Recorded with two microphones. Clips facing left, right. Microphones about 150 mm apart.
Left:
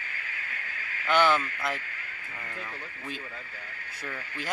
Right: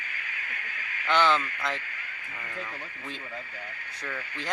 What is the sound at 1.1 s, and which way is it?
Speech, 10° left (ahead or behind).